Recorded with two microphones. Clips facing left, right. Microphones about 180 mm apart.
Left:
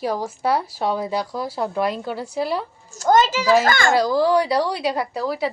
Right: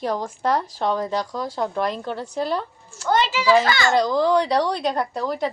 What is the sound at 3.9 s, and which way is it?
Speech, 5° left (ahead or behind).